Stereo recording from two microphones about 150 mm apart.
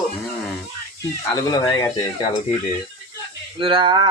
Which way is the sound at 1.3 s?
25° left (ahead or behind).